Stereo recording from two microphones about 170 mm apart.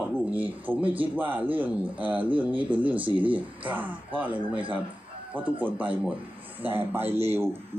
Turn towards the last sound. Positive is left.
turn(degrees=-15)  # may be behind; listen again after turning